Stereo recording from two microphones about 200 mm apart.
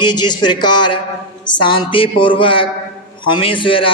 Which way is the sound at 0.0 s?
20° left (ahead or behind).